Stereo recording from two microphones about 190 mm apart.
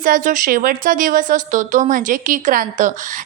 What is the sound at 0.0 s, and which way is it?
A woman's voice, 45° right (ahead or behind).